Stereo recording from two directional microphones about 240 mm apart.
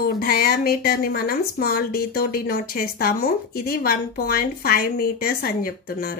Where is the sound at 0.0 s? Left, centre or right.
Left.